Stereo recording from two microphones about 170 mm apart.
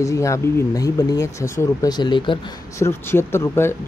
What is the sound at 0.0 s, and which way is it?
Speech, 20° left (ahead or behind).